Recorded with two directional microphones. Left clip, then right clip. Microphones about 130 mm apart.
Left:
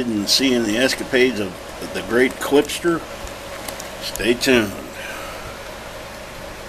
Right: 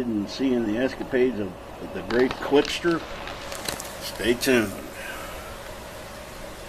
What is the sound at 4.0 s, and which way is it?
Speech, centre (ahead or behind).